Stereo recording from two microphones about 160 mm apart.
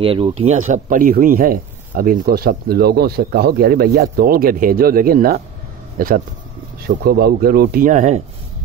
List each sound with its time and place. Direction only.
0.0 s speech: 35° right (ahead or behind)